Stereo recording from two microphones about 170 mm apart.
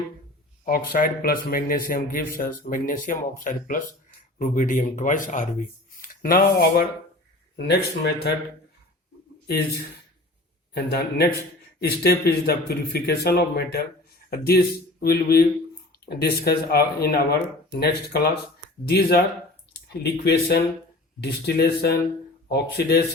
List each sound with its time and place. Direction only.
0.6 s a man's voice: 55° left (ahead or behind)
10.8 s speech: 70° left (ahead or behind)